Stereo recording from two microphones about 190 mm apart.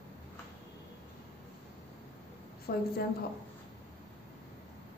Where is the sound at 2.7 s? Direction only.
55° left (ahead or behind).